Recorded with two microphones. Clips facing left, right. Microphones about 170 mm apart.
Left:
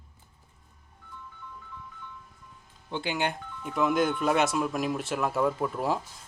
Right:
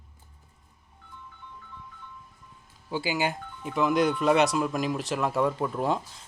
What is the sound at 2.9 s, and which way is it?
Speech, 5° right (ahead or behind).